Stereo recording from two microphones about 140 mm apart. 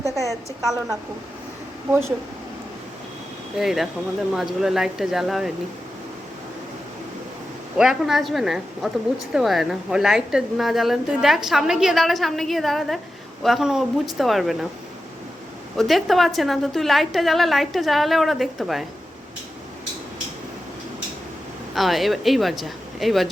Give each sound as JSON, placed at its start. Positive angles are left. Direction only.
{"t": 0.3, "sound": "a woman's voice", "side_deg": -25}
{"t": 3.6, "sound": "a woman's voice", "side_deg": 0}
{"t": 7.8, "sound": "a woman's voice", "side_deg": -5}
{"t": 15.8, "sound": "a woman's voice", "side_deg": 0}
{"t": 21.8, "sound": "a woman's voice", "side_deg": 0}